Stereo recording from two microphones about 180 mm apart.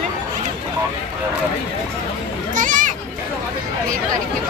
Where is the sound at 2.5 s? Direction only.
45° right (ahead or behind).